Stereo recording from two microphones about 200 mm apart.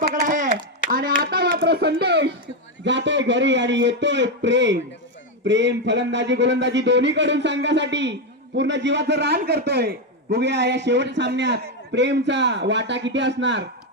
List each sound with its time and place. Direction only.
0.1 s a man's voice: 40° right (ahead or behind); by 13.7 s 65° right (ahead or behind)